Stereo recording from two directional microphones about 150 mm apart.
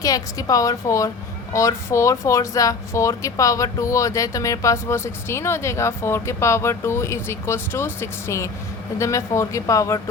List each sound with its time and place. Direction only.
0.0 s speech: 25° left (ahead or behind)